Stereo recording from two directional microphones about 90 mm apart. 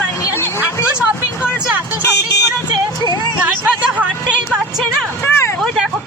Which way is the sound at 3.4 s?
20° right (ahead or behind).